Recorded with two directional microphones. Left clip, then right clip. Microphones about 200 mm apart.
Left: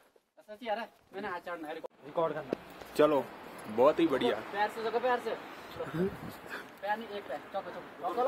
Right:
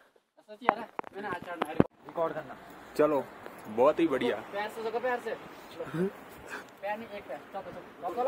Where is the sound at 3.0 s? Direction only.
Centre (ahead or behind).